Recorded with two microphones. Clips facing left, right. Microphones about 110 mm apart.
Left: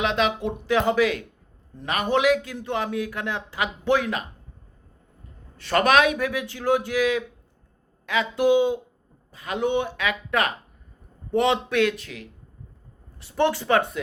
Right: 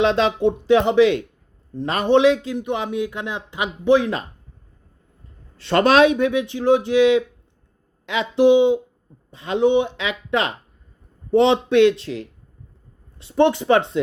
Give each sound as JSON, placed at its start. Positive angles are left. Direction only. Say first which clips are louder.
{"t": 0.0, "sound": "speech", "louder": "right 6 dB", "side_deg": -30}
{"t": 5.5, "sound": "speech", "louder": "right 4 dB", "side_deg": -25}